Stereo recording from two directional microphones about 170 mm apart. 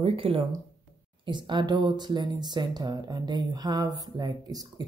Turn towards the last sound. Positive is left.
turn(degrees=-20)  # may be behind; listen again after turning